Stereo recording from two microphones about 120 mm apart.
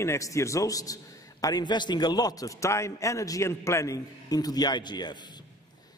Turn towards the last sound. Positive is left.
turn(degrees=35)  # may be behind; listen again after turning